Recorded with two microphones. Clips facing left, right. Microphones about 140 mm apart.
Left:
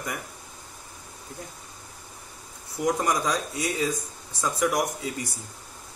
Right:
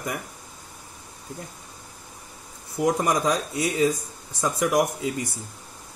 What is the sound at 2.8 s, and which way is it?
Speech, 25° right (ahead or behind).